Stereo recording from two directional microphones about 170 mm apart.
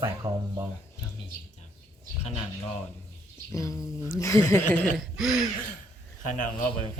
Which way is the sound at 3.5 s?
20° left (ahead or behind).